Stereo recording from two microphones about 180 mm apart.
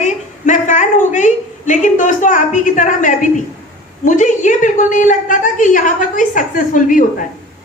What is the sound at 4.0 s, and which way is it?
A woman's voice, 45° left (ahead or behind).